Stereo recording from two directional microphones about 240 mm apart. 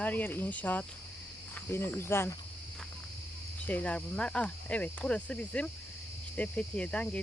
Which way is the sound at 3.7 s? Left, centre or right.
Centre.